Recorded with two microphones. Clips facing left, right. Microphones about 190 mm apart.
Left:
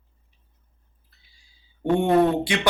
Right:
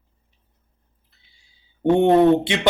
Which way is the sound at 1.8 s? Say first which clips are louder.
Right 5 dB; 25° right (ahead or behind).